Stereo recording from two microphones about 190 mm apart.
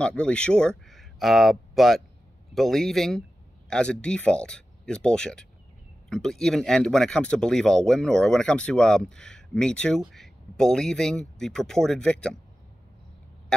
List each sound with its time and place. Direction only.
0.0 s speech: 5° left (ahead or behind)